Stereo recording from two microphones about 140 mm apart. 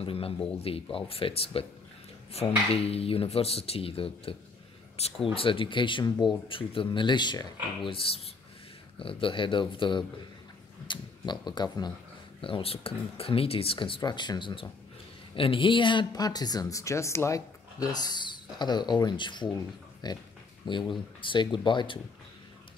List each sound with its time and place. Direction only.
0.0 s speech: 40° left (ahead or behind)